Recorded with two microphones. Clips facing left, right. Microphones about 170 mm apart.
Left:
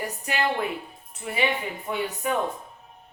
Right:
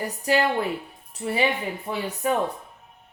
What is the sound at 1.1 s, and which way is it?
Speech, 35° right (ahead or behind).